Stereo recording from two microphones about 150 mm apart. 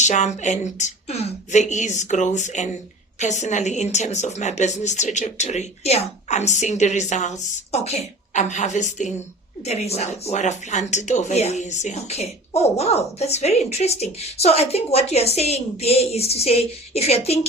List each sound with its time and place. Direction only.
0.0 s speech: 50° left (ahead or behind)